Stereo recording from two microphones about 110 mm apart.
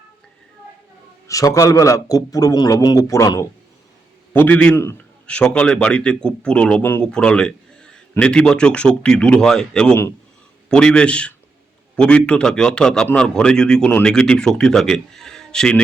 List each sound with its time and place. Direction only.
1.3 s a man's voice: 30° left (ahead or behind)
4.3 s a man's voice: 15° left (ahead or behind)